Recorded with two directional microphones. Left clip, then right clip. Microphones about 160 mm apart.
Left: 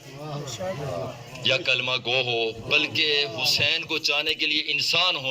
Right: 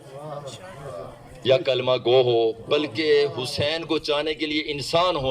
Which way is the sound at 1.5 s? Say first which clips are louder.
Right 3 dB; 45° right (ahead or behind).